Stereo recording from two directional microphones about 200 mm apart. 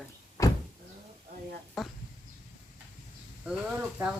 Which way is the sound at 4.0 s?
10° right (ahead or behind).